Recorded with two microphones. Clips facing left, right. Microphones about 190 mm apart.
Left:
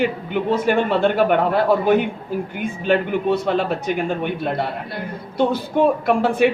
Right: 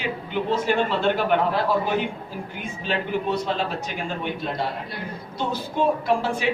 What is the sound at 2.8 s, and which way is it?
A man's voice, 55° left (ahead or behind).